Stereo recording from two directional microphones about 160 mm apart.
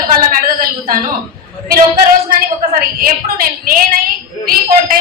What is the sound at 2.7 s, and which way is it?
A woman's voice, 65° right (ahead or behind).